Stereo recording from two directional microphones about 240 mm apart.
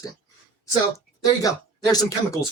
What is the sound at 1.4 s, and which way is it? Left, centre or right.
Speech, centre.